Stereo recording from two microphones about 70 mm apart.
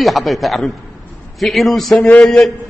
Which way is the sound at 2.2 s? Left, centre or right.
Centre.